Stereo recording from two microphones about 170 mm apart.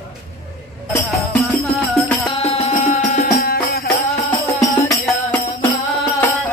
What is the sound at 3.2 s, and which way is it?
Music, 65° left (ahead or behind).